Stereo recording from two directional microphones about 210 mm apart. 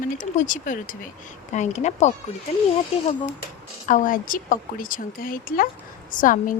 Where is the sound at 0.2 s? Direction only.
35° left (ahead or behind).